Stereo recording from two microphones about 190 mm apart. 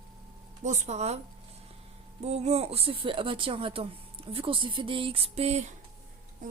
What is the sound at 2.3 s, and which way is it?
Speech, 35° right (ahead or behind).